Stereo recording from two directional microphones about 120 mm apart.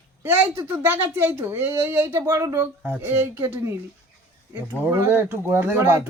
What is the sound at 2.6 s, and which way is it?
Speech, 15° right (ahead or behind).